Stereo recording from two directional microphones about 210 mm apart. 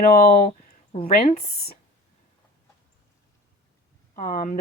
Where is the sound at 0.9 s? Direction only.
25° left (ahead or behind).